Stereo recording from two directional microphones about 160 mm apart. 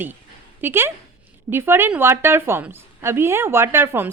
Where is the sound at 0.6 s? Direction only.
15° right (ahead or behind).